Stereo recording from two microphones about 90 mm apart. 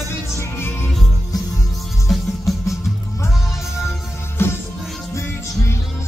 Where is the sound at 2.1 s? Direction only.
Centre (ahead or behind).